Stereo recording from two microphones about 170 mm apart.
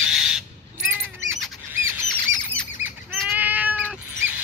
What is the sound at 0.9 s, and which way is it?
Bird, 15° right (ahead or behind).